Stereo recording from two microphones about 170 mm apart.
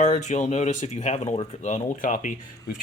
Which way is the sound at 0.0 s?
45° left (ahead or behind).